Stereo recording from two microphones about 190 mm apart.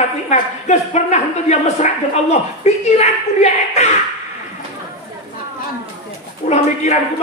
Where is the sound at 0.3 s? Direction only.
35° left (ahead or behind).